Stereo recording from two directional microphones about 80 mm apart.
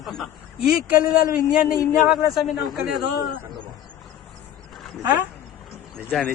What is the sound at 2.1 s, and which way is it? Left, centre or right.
Speech, centre.